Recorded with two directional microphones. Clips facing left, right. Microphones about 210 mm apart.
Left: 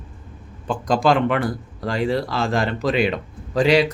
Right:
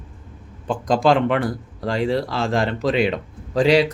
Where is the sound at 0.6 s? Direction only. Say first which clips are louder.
Right 1 dB; 25° right (ahead or behind).